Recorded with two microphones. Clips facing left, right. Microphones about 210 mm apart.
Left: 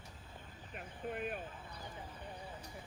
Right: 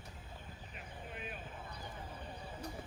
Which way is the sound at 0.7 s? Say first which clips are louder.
Left 8 dB; 50° left (ahead or behind).